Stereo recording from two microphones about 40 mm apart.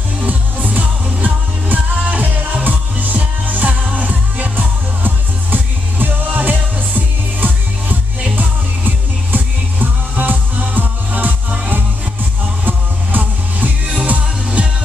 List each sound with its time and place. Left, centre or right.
0.2 s music: right
12.6 s music: right
13.9 s music: right